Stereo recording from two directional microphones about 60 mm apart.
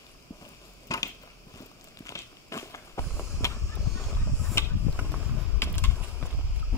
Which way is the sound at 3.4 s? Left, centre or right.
Left.